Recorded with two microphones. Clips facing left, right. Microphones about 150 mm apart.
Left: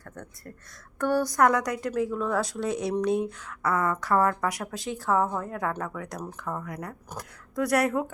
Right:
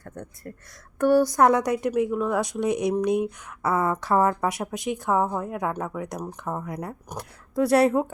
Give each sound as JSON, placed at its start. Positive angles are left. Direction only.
{"t": 0.0, "sound": "a sound", "side_deg": -20}
{"t": 0.9, "sound": "speech", "side_deg": -15}
{"t": 1.4, "sound": "speech", "side_deg": -25}
{"t": 3.6, "sound": "speech", "side_deg": -25}